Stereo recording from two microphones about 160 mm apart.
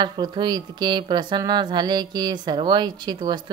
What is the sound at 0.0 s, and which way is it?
Speech, 25° right (ahead or behind).